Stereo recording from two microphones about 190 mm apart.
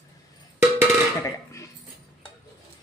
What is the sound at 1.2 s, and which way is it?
Burping, 15° left (ahead or behind).